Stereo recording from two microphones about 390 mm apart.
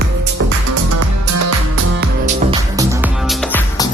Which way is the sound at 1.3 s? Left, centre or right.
Right.